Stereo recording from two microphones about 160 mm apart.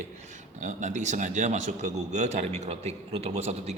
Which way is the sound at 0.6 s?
50° right (ahead or behind).